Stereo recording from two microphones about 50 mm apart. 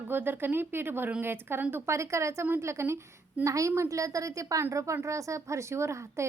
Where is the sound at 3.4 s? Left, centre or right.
Right.